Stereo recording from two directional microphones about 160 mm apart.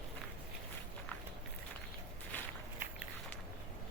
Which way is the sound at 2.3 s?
10° left (ahead or behind).